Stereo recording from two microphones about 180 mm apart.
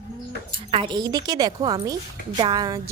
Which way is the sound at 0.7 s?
30° right (ahead or behind).